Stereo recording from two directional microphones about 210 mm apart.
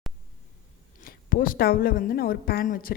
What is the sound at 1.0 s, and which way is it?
A woman's voice, 45° left (ahead or behind).